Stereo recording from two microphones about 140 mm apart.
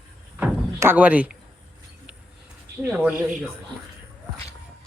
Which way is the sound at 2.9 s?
10° right (ahead or behind).